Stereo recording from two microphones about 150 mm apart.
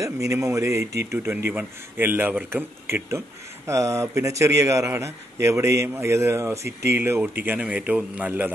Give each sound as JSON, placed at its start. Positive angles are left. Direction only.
{"t": 0.0, "sound": "speech", "side_deg": -20}